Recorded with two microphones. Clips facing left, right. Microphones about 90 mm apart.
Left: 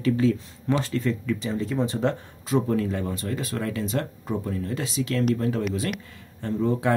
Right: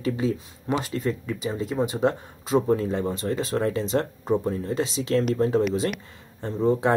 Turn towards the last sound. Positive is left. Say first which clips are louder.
# right 2 dB
turn(degrees=-25)  # may be behind; listen again after turning